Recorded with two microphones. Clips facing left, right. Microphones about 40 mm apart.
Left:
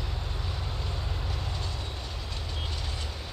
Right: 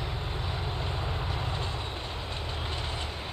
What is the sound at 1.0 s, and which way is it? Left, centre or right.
Vehicle, right.